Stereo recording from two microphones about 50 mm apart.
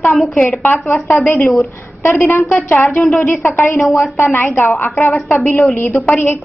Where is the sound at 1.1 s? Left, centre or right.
Centre.